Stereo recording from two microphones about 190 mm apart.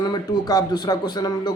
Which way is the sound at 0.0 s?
20° left (ahead or behind).